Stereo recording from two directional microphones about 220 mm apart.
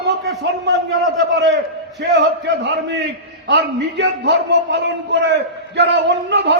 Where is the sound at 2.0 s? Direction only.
55° right (ahead or behind).